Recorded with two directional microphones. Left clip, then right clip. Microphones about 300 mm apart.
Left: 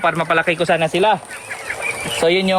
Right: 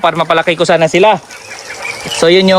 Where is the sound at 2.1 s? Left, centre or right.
Right.